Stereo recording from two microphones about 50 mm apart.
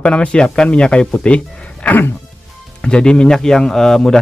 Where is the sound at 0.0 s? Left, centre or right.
Left.